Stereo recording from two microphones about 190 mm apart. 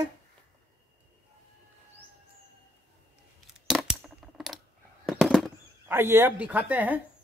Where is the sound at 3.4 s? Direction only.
5° right (ahead or behind).